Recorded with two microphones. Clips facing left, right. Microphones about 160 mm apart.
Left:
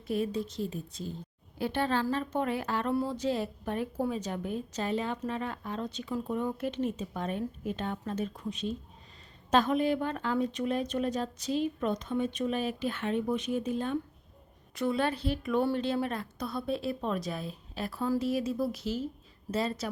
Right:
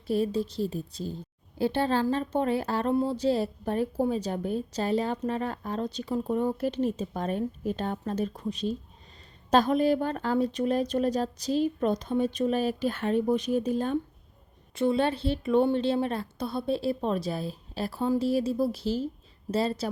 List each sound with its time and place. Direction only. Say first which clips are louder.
0.1 s speech: right 4 dB; 30° right (ahead or behind)
14.8 s a woman's voice: right 4 dB; 25° right (ahead or behind)